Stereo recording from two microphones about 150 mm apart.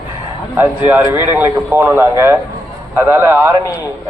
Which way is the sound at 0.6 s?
10° right (ahead or behind).